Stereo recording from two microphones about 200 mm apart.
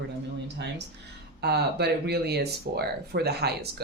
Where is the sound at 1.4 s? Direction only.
55° right (ahead or behind).